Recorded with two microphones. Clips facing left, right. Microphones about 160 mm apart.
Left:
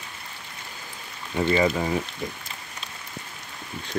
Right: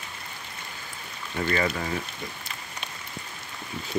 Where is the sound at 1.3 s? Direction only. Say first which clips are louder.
Left 5 dB; 20° left (ahead or behind).